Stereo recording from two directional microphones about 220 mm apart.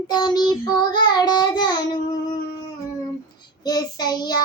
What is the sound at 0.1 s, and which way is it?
Child singing, 20° left (ahead or behind).